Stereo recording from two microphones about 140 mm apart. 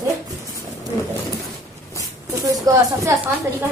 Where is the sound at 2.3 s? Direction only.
25° right (ahead or behind).